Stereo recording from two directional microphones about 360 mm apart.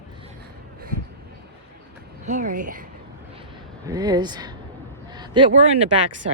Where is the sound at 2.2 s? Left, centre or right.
Right.